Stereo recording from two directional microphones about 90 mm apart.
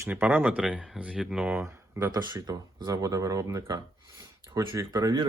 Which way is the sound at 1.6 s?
30° right (ahead or behind).